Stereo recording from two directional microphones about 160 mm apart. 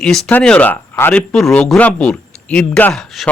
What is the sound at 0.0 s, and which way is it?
A man's voice, 5° left (ahead or behind).